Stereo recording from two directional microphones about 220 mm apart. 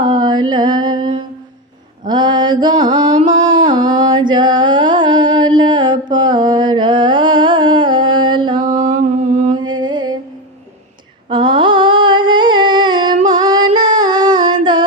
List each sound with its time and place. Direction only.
0.0 s mantra: 20° right (ahead or behind)
2.0 s mantra: 20° right (ahead or behind)
3.3 s a sound: 20° right (ahead or behind)
8.6 s mantra: 35° right (ahead or behind)
9.6 s music: 20° right (ahead or behind)
11.3 s humming: 20° right (ahead or behind)